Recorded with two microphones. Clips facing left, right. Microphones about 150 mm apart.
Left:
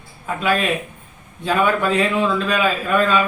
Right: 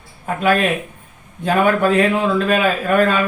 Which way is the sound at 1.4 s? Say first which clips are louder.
Right 3 dB; 50° right (ahead or behind).